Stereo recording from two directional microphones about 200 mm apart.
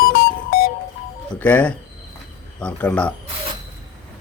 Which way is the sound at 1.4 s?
10° left (ahead or behind).